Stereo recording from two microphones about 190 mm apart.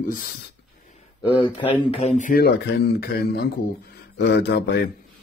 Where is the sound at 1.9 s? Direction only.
30° left (ahead or behind); by 4.8 s 60° left (ahead or behind).